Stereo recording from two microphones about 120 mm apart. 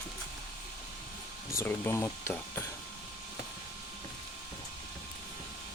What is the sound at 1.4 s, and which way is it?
Speech, 20° left (ahead or behind).